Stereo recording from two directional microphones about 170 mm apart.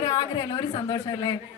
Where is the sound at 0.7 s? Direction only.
30° left (ahead or behind).